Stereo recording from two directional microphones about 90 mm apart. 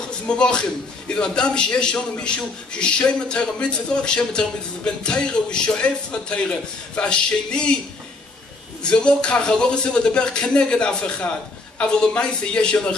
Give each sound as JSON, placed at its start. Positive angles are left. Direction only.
{"t": 0.3, "sound": "a man's voice", "side_deg": 10}
{"t": 8.8, "sound": "a man's voice", "side_deg": 10}